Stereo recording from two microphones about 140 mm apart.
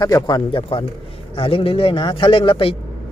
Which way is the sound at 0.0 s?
25° left (ahead or behind).